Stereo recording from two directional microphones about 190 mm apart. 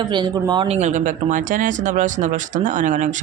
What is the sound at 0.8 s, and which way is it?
Speech, 40° right (ahead or behind).